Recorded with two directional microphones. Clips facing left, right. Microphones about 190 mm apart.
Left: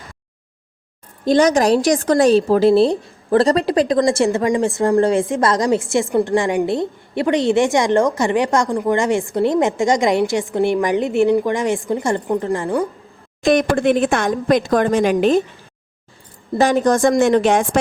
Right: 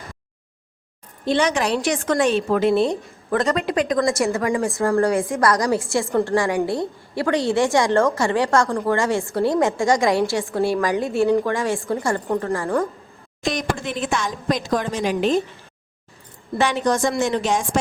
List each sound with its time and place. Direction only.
1.2 s a woman's voice: 40° left (ahead or behind); by 12.9 s 15° left (ahead or behind)
13.4 s speech: 55° left (ahead or behind)
16.6 s speech: 45° left (ahead or behind); by 17.7 s 60° left (ahead or behind)